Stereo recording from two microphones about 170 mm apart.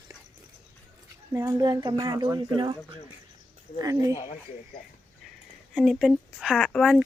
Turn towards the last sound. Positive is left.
turn(degrees=0)  # may be behind; listen again after turning